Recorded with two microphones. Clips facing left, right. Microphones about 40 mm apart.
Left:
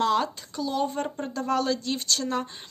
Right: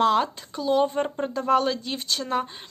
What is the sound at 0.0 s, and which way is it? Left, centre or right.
A woman's voice, centre.